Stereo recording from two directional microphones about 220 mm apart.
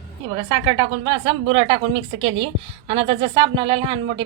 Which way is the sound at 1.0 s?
20° right (ahead or behind).